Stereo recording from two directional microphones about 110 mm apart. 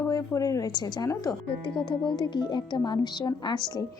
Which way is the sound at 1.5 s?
50° left (ahead or behind).